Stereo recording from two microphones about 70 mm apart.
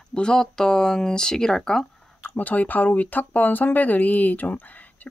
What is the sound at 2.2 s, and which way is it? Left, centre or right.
Speech, left.